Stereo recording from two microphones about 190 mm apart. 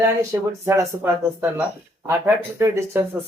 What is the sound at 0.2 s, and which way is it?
Speech, 15° right (ahead or behind).